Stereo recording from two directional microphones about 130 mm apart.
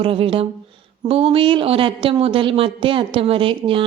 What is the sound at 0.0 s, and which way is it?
Speech, 45° right (ahead or behind).